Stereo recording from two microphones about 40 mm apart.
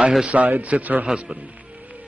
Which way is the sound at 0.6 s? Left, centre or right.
Right.